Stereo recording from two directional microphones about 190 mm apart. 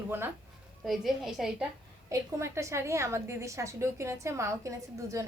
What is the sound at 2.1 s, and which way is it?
A woman's voice, 15° right (ahead or behind).